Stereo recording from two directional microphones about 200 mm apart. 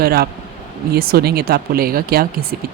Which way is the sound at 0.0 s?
50° right (ahead or behind).